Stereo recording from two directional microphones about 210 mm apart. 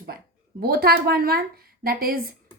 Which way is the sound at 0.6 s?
45° right (ahead or behind).